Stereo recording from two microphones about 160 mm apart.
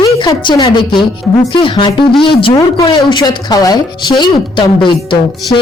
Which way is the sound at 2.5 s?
20° left (ahead or behind).